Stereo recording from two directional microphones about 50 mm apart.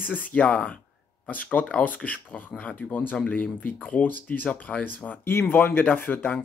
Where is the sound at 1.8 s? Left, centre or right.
Left.